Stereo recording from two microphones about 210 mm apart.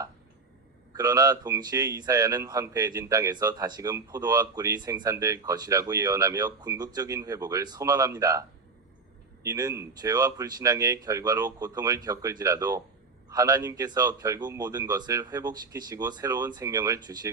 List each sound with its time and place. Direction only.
0.9 s speech: 15° right (ahead or behind)